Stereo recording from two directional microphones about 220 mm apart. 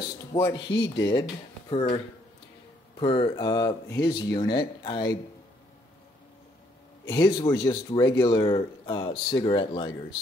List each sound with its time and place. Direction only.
0.3 s speech: 15° left (ahead or behind)
3.0 s speech: 20° left (ahead or behind)
7.1 s speech: 15° left (ahead or behind)